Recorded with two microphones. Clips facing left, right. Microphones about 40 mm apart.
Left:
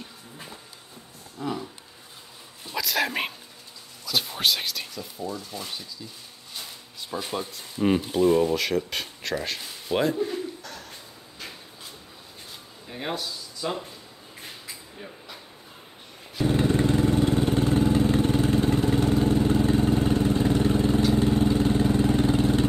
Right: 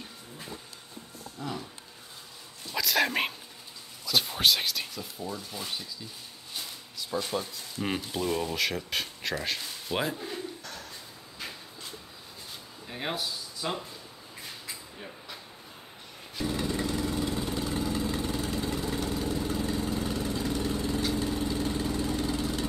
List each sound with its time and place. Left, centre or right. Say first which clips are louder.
1.4 s speech: left 6 dB; centre
2.7 s a sound: even; centre
7.1 s speech: left 1 dB; centre
8.5 s speech: left 4 dB; centre
10.1 s bird: left 8 dB; centre
12.8 s speech: left 2 dB; centre
14.7 s a sound: left 1 dB; centre
16.4 s vehicle: left 8 dB; left